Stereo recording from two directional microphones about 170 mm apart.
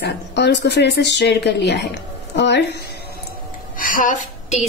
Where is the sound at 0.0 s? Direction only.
85° left.